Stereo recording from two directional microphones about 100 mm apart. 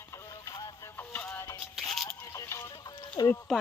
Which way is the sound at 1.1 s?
20° left (ahead or behind).